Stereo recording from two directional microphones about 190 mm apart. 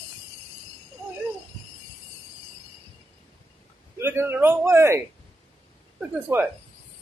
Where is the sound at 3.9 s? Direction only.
10° right (ahead or behind).